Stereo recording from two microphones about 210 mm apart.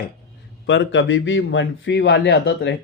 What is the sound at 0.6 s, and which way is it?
A man's voice, 60° left (ahead or behind).